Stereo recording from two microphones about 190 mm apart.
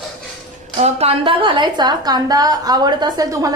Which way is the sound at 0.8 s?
30° right (ahead or behind).